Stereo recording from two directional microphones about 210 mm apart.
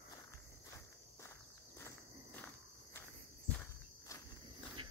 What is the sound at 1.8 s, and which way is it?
Walk, 10° left (ahead or behind).